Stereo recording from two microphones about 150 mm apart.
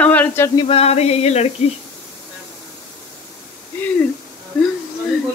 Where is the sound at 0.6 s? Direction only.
40° left (ahead or behind).